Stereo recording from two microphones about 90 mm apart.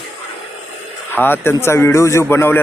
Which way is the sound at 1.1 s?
25° left (ahead or behind).